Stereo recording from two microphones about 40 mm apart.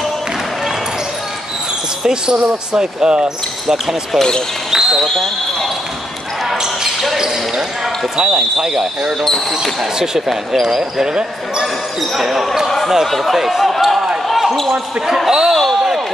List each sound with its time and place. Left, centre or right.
2.0 s speech: centre
3.6 s speech: centre
4.6 s speech: centre
5.0 s speech: centre
6.6 s speech: centre
10.8 s speech: centre
12.2 s speech: centre
12.6 s a sound: centre
13.0 s speech: centre
14.2 s basketball bounce: centre
14.7 s speech: centre